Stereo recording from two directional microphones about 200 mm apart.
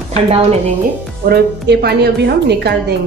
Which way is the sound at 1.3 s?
55° right (ahead or behind).